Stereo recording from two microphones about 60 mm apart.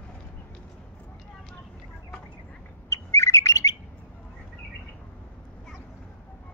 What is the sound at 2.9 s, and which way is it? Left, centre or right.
Bird, left.